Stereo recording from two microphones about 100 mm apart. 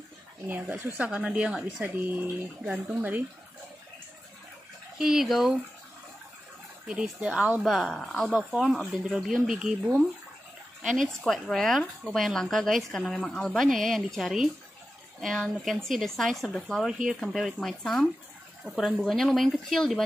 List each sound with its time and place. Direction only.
0.5 s speech: 20° right (ahead or behind)
2.6 s a woman's voice: 5° right (ahead or behind)
3.0 s speech: 20° right (ahead or behind)
4.9 s a woman's voice: 5° right (ahead or behind)
6.9 s a woman's voice: 10° right (ahead or behind)